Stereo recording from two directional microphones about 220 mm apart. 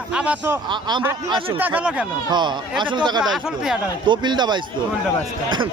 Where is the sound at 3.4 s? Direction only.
Centre (ahead or behind).